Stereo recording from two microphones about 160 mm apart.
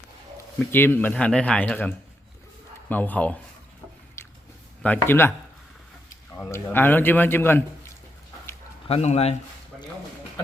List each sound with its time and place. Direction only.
0.7 s a man's voice: 15° left (ahead or behind)
2.9 s a man's voice: 10° left (ahead or behind)
4.2 s a sound: 15° left (ahead or behind)
4.8 s a man's voice: 10° left (ahead or behind)
6.3 s a man's voice: 15° left (ahead or behind)
8.9 s speech: 40° left (ahead or behind)